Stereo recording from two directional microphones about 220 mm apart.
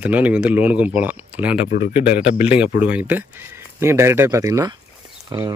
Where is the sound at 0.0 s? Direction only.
5° right (ahead or behind).